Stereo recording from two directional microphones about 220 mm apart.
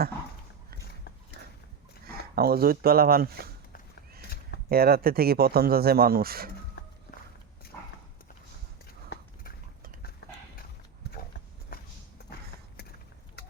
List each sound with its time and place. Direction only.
2.0 s speech: 45° right (ahead or behind)
4.7 s speech: 45° right (ahead or behind)